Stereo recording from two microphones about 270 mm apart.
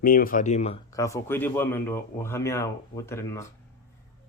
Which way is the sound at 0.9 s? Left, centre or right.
Centre.